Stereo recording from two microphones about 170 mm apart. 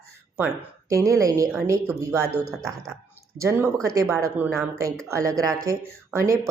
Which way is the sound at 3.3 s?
15° right (ahead or behind).